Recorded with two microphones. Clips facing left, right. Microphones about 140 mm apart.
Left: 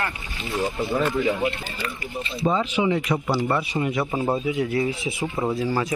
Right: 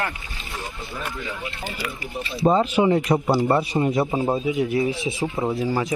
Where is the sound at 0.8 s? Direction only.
60° left (ahead or behind).